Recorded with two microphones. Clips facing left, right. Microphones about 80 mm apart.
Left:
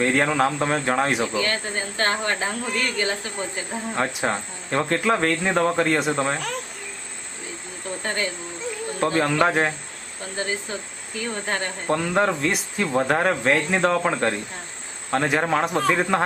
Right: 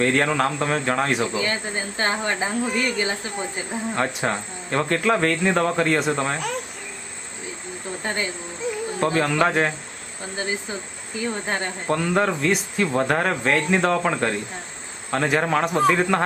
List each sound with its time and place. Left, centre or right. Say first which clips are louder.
0.0 s speech: even; centre
1.3 s speech: even; centre
3.7 s speech: right 1 dB; centre
8.0 s speech: even; centre
9.0 s speech: left 1 dB; centre
10.3 s speech: even; centre
11.9 s speech: even; centre